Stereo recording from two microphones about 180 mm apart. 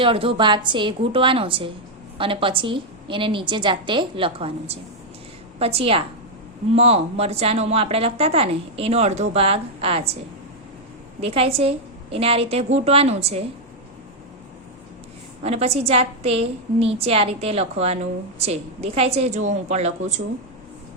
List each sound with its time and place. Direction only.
0.0 s a woman's voice: 30° right (ahead or behind)
11.2 s a woman's voice: 30° right (ahead or behind)
15.4 s a woman's voice: 35° right (ahead or behind)